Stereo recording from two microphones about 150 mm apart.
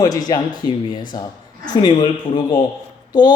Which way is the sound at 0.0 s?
25° left (ahead or behind).